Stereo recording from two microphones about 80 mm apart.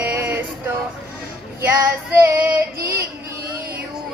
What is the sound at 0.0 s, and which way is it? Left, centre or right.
Music, right.